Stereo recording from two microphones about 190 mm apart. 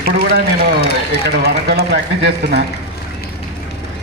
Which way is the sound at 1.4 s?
55° right (ahead or behind).